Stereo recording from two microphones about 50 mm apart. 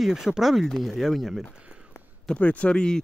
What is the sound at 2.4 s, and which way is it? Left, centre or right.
Speech, left.